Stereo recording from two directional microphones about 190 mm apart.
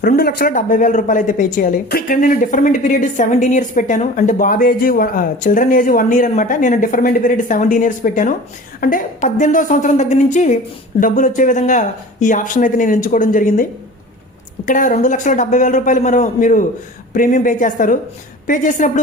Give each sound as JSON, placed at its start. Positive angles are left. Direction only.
{"t": 0.0, "sound": "a man's voice", "side_deg": 55}